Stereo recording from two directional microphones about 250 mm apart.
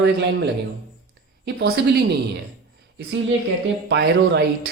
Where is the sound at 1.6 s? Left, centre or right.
Right.